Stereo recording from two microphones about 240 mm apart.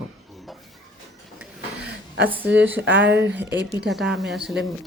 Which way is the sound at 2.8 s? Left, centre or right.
Right.